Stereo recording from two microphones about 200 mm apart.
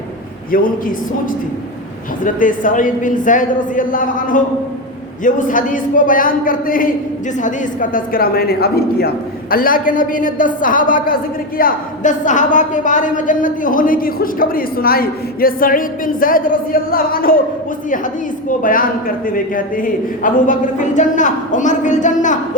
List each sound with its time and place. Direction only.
0.5 s a woman's voice: 45° left (ahead or behind)
18.6 s a man's voice: 45° left (ahead or behind)